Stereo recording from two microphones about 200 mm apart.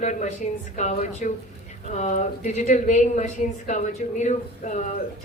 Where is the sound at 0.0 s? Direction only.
35° left (ahead or behind).